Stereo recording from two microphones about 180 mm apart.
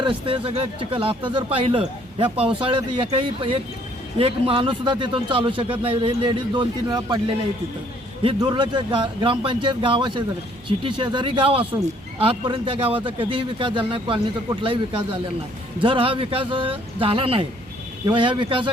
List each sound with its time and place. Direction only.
0.0 s a man's voice: 30° right (ahead or behind)